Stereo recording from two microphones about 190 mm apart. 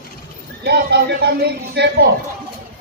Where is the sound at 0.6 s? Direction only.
60° right (ahead or behind).